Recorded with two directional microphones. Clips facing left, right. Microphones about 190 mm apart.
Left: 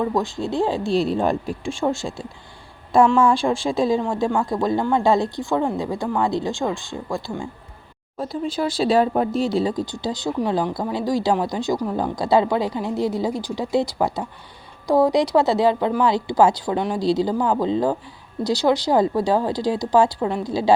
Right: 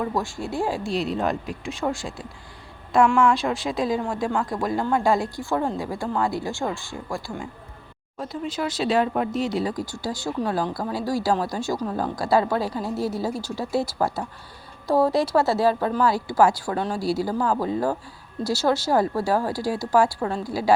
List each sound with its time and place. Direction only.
0.1 s speech: 20° left (ahead or behind)